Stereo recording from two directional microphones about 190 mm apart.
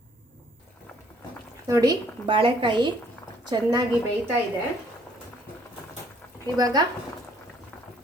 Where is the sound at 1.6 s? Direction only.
20° right (ahead or behind).